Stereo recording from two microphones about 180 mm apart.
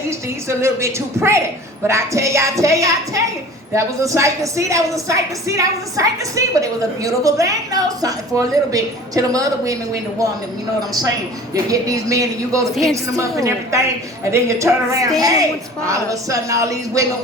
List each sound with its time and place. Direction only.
0.4 s a woman's voice: 15° right (ahead or behind)
11.5 s a woman's voice: 20° right (ahead or behind)